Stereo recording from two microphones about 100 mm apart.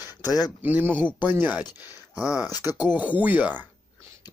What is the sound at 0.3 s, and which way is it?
Speech, 40° left (ahead or behind).